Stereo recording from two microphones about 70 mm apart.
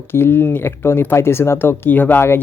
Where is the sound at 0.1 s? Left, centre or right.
Left.